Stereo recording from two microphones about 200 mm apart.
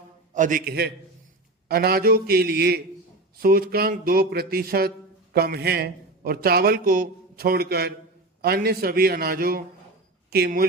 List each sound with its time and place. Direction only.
0.3 s a man's voice: 40° right (ahead or behind)